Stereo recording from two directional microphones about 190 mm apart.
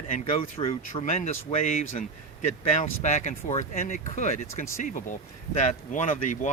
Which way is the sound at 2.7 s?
40° left (ahead or behind).